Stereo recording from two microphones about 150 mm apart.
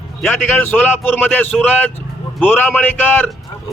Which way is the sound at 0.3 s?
15° left (ahead or behind).